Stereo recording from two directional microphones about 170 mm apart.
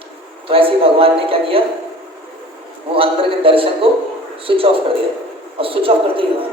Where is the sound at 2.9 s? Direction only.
30° right (ahead or behind).